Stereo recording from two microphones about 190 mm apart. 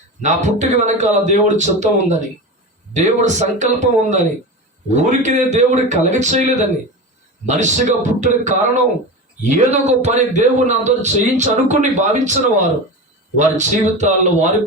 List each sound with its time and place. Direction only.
0.2 s a man's voice: 40° right (ahead or behind)